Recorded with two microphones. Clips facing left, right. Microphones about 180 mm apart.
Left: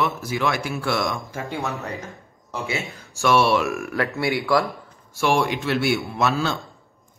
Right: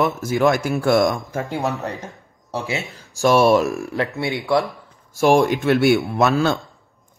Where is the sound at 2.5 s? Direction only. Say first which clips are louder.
Right 3 dB; 35° right (ahead or behind).